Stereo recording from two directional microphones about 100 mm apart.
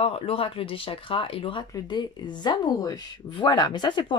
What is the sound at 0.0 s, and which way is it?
Speech, 75° left (ahead or behind).